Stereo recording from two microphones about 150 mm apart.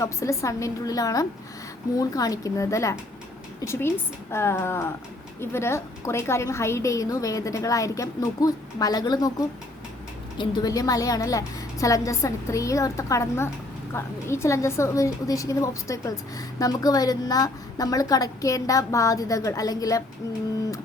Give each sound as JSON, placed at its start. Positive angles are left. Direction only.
{"t": 0.0, "sound": "a woman's voice", "side_deg": 20}
{"t": 10.3, "sound": "a woman's voice", "side_deg": 25}